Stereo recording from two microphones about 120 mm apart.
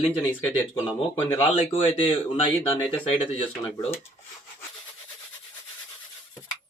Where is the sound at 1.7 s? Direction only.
50° left (ahead or behind).